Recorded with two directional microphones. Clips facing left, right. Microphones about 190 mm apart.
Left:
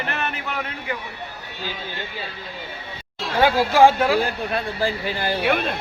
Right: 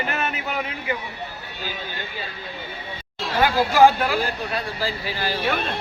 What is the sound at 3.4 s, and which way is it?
Speech, 25° left (ahead or behind).